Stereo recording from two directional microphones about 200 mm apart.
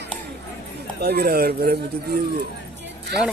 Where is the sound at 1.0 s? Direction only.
50° right (ahead or behind).